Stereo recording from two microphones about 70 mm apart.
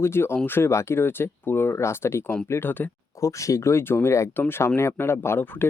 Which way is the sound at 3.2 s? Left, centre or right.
Left.